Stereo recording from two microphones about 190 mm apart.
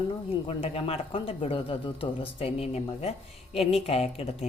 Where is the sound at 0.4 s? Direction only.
30° left (ahead or behind).